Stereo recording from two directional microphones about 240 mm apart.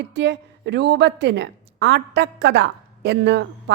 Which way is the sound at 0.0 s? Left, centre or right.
Right.